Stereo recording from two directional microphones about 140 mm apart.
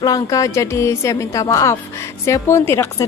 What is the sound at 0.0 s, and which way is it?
A woman's voice, 25° left (ahead or behind).